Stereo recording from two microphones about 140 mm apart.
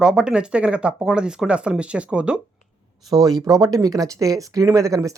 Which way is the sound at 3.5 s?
25° right (ahead or behind).